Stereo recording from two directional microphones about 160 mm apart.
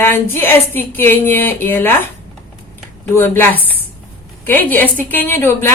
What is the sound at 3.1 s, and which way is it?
A woman's voice, 15° left (ahead or behind).